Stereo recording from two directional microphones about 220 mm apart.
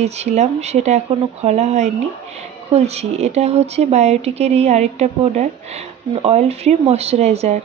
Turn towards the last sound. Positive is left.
turn(degrees=-30)  # may be behind; listen again after turning